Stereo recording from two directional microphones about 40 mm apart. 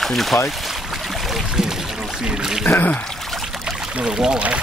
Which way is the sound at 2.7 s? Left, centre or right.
Left.